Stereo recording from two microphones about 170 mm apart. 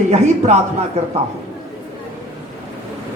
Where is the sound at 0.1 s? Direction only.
40° right (ahead or behind).